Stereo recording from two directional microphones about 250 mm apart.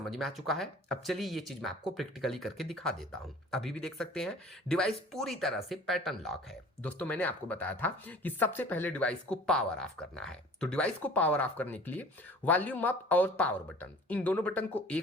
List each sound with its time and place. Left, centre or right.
0.0 s speech: centre